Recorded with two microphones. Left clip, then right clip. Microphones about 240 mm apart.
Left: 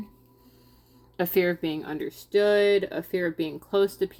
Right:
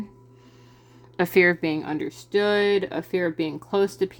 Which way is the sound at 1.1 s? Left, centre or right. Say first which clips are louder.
Right 5 dB; right.